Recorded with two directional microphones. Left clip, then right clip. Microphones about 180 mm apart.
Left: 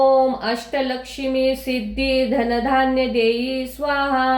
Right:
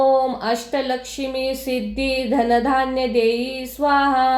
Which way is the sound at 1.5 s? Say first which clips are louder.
Left 2 dB; 30° right (ahead or behind).